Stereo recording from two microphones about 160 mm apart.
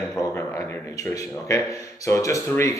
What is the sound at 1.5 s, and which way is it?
A man's voice, 20° left (ahead or behind).